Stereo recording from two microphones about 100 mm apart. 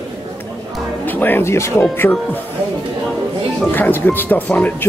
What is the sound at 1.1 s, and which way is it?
Speech, 20° left (ahead or behind).